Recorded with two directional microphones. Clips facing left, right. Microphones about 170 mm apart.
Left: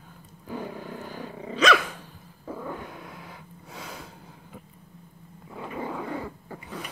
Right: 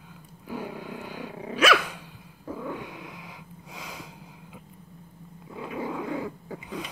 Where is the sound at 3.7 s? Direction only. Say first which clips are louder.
Left 1 dB; centre (ahead or behind).